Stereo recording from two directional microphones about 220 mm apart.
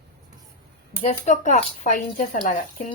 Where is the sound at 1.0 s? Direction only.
30° left (ahead or behind).